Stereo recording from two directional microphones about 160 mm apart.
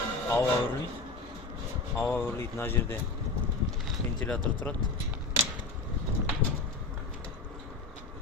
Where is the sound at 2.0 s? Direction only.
15° left (ahead or behind).